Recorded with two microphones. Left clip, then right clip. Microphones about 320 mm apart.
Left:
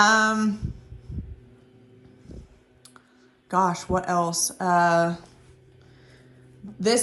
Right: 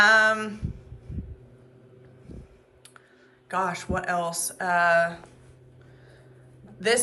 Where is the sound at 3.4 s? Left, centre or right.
Centre.